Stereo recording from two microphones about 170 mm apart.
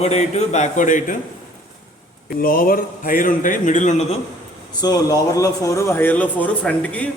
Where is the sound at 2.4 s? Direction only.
60° left (ahead or behind).